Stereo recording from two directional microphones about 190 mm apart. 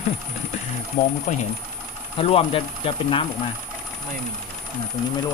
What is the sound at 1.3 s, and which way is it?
Speech, 40° left (ahead or behind).